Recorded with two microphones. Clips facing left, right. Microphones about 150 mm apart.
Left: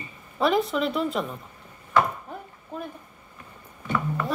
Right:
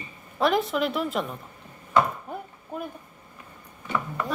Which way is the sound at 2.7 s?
10° right (ahead or behind).